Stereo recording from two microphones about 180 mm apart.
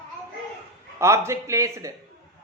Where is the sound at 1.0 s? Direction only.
15° right (ahead or behind).